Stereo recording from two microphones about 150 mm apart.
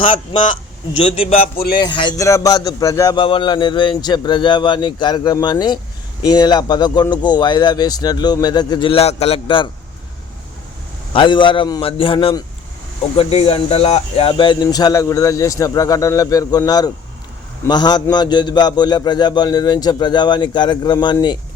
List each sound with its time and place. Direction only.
0.0 s a man's voice: 35° left (ahead or behind)
1.5 s speech: 90° left
1.8 s a man's voice: 30° left (ahead or behind)
11.1 s a man's voice: 30° left (ahead or behind)